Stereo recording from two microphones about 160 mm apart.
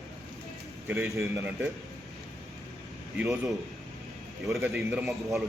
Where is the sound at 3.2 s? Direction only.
Centre (ahead or behind).